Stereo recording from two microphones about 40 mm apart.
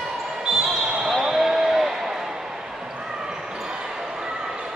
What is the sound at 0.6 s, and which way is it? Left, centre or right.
Basketball bounce, centre.